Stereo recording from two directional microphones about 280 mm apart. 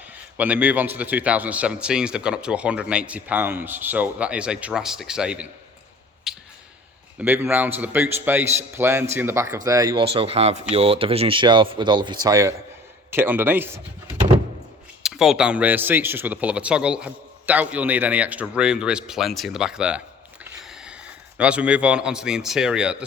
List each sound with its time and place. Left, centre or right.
0.1 s a man's voice: centre
6.3 s a sound: centre
7.2 s speech: centre
15.0 s a man's voice: centre